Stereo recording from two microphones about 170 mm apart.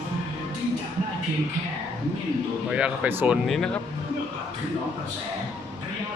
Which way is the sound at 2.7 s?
5° right (ahead or behind).